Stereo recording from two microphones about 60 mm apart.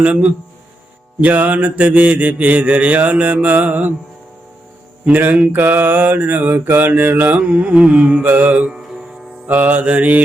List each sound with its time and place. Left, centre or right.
0.0 s mantra: right
5.0 s mantra: right
7.3 s mantra: centre